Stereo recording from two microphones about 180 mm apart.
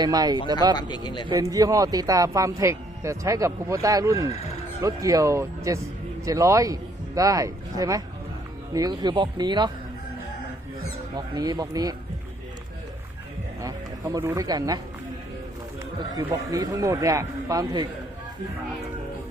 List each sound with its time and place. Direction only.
0.0 s speech: 20° right (ahead or behind)
0.8 s speech: 25° left (ahead or behind)
1.3 s speech: 20° right (ahead or behind)
11.3 s speech: 20° right (ahead or behind)
13.6 s speech: 20° right (ahead or behind)
16.1 s speech: 20° right (ahead or behind)